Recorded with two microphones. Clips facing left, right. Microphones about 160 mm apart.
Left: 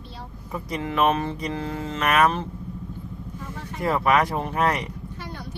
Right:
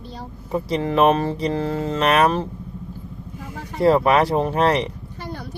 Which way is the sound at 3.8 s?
30° right (ahead or behind).